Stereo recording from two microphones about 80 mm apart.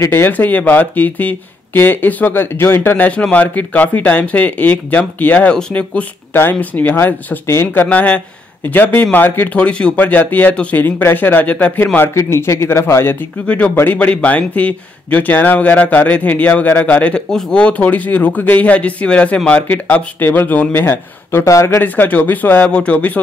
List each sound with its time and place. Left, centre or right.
0.0 s speech: left
3.1 s speech: centre
12.1 s speech: left
13.9 s speech: centre; by 21.8 s left
21.8 s speech: left